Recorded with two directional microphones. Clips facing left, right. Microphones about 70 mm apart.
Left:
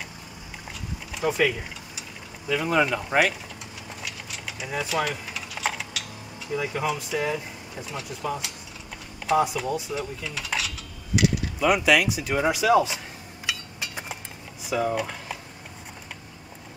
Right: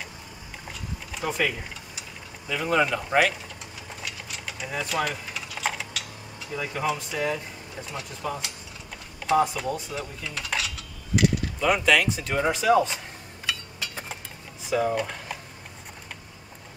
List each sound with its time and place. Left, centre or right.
1.1 s speech: centre
4.0 s typing: centre
9.2 s speech: centre
13.5 s a sound: centre
14.7 s speech: centre